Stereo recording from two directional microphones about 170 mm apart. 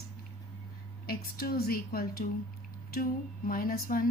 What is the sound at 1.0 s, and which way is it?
A woman's voice, 60° left (ahead or behind).